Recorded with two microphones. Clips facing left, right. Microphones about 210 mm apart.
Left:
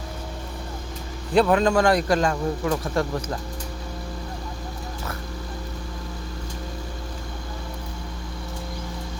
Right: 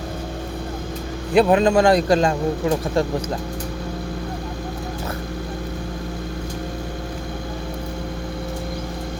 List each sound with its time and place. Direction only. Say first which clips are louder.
1.3 s speech: right 3 dB; 20° right (ahead or behind)